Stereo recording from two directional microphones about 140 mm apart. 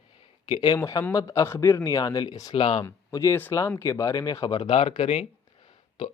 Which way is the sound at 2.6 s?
40° left (ahead or behind).